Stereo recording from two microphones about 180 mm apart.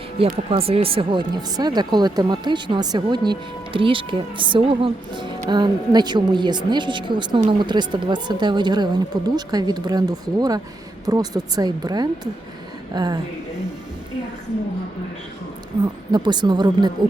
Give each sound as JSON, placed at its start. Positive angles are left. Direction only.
{"t": 0.2, "sound": "speech", "side_deg": -30}
{"t": 16.1, "sound": "speech", "side_deg": -25}